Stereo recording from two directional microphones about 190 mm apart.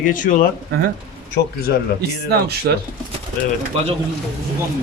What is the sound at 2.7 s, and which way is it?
Speech, 60° right (ahead or behind).